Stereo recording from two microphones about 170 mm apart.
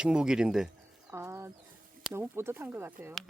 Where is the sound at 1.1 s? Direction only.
15° right (ahead or behind).